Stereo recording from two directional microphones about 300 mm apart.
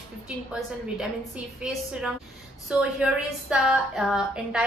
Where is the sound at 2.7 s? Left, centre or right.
Centre.